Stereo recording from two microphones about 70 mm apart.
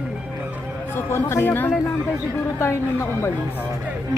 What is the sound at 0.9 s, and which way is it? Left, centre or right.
Speech, left.